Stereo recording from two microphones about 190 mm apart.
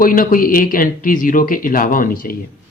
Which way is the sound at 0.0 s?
45° left (ahead or behind).